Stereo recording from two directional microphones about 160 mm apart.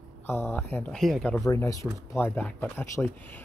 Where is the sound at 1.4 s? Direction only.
20° left (ahead or behind).